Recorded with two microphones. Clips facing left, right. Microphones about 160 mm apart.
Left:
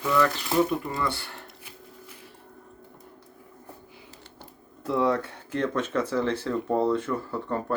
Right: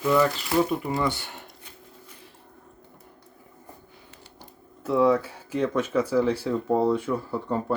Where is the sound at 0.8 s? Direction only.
20° right (ahead or behind).